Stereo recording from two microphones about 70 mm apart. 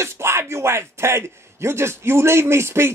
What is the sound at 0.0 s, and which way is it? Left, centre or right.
A man's voice, right.